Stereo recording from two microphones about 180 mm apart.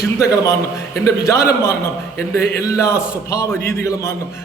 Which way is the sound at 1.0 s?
15° left (ahead or behind).